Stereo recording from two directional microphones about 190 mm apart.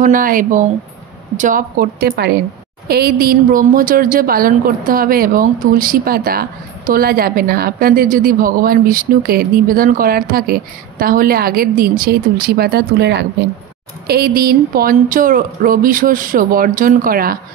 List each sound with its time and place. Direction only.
0.0 s a woman's voice: 45° right (ahead or behind)